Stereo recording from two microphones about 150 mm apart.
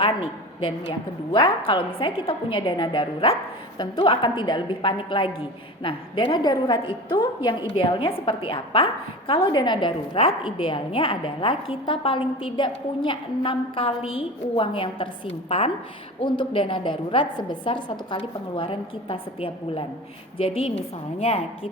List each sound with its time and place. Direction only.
0.0 s a woman's voice: 35° left (ahead or behind)